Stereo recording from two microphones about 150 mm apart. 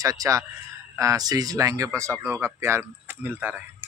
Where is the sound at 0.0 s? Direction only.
20° right (ahead or behind).